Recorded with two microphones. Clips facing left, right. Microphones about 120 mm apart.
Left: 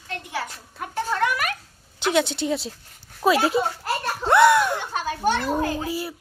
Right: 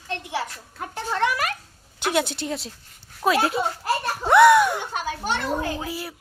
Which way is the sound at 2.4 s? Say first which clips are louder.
Left 4 dB; centre (ahead or behind).